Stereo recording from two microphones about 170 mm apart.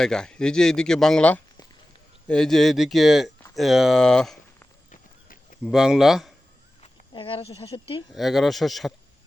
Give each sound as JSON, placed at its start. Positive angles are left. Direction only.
{"t": 0.0, "sound": "speech", "side_deg": 5}
{"t": 4.9, "sound": "clip-clop", "side_deg": 50}
{"t": 5.6, "sound": "speech", "side_deg": -5}
{"t": 6.8, "sound": "speech", "side_deg": 30}
{"t": 8.1, "sound": "speech", "side_deg": 0}